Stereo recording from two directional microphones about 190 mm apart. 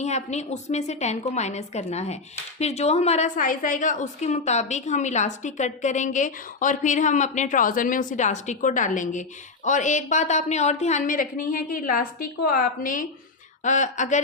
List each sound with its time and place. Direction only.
0.0 s a woman's voice: 35° left (ahead or behind)